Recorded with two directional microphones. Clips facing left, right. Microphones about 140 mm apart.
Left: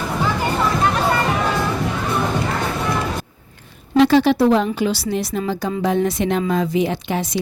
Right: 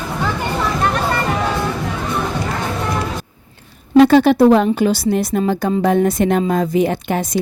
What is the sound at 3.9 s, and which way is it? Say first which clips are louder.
A woman's voice: right 4 dB; 50° right (ahead or behind).